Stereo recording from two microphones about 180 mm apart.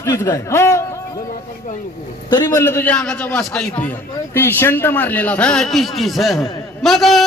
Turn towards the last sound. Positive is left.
turn(degrees=0)  # may be behind; listen again after turning